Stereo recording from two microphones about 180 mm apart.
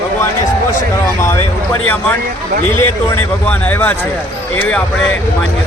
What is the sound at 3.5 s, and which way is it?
Speech, 10° left (ahead or behind).